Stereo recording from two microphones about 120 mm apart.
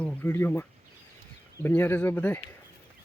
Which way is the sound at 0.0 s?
15° left (ahead or behind).